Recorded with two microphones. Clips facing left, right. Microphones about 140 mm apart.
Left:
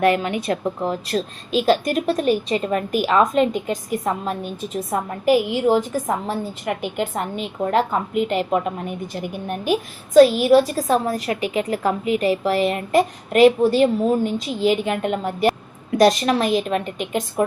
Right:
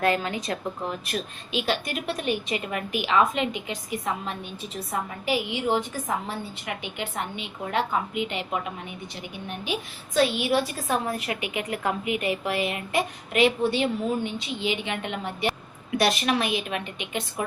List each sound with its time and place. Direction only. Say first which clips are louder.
0.0 s a woman's voice: left 6 dB; 25° left (ahead or behind)
1.1 s a woman's voice: left 8 dB; 40° left (ahead or behind)